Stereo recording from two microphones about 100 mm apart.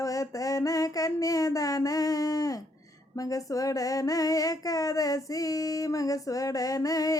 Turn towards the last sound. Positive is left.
turn(degrees=35)  # may be behind; listen again after turning